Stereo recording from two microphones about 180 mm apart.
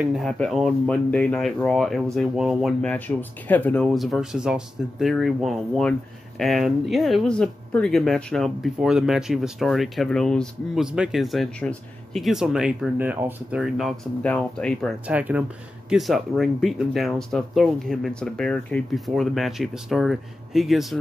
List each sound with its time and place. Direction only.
0.0 s speech: centre (ahead or behind)
15.0 s speech: 10° right (ahead or behind)